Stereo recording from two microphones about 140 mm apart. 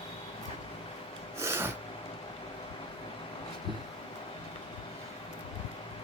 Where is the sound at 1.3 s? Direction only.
20° right (ahead or behind).